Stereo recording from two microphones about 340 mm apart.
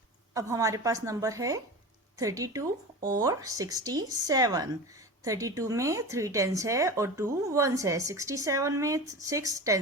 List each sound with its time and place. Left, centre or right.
0.3 s speech: centre